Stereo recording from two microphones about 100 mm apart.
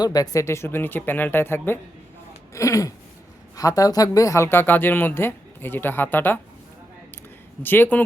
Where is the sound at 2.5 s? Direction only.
35° left (ahead or behind).